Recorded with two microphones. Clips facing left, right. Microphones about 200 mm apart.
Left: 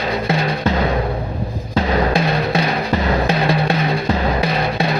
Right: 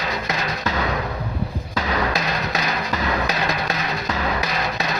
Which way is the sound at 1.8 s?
30° left (ahead or behind).